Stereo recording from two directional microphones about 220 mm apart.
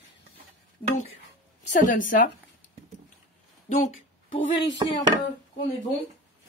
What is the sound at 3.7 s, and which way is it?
Speech, 35° left (ahead or behind).